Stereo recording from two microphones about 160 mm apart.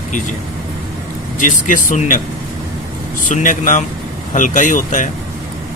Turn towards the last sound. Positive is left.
turn(degrees=50)  # may be behind; listen again after turning